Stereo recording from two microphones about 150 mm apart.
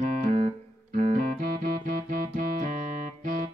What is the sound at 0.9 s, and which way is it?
Music, 60° right (ahead or behind).